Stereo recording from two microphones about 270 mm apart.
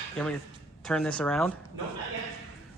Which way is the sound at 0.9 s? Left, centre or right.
Centre.